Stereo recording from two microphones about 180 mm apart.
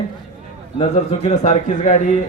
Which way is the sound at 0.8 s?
40° left (ahead or behind).